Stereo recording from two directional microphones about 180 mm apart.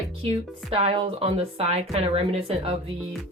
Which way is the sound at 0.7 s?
30° right (ahead or behind).